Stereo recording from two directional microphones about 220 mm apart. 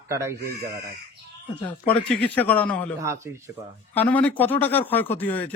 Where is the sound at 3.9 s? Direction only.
10° left (ahead or behind).